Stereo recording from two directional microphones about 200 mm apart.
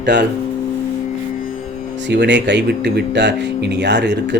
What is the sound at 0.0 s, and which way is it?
Speech, 55° right (ahead or behind).